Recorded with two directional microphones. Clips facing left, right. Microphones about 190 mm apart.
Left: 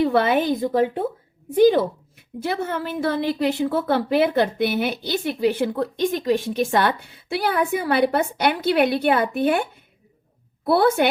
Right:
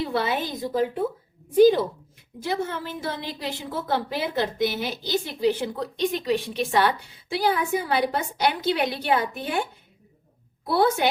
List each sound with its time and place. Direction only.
0.0 s a woman's voice: 60° left (ahead or behind)
2.4 s a woman's voice: 55° left (ahead or behind)
10.7 s a woman's voice: 60° left (ahead or behind)